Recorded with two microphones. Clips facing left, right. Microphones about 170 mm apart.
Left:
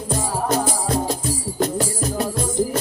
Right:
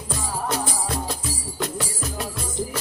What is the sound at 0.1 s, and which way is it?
Music, 45° left (ahead or behind).